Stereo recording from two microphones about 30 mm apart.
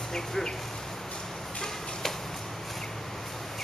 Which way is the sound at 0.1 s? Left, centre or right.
Centre.